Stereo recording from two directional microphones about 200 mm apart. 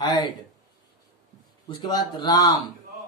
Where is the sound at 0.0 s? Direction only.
20° left (ahead or behind).